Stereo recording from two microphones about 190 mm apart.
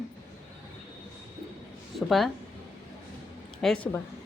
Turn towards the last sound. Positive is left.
turn(degrees=5)  # may be behind; listen again after turning